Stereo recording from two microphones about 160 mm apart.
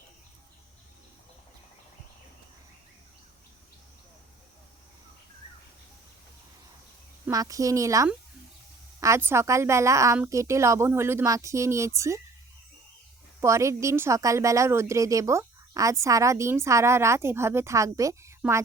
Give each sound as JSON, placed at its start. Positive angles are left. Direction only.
{"t": 7.3, "sound": "a woman's voice", "side_deg": -20}
{"t": 13.4, "sound": "a woman's voice", "side_deg": -20}